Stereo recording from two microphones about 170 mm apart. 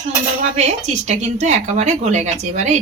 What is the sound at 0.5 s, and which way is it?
Speech, 40° right (ahead or behind).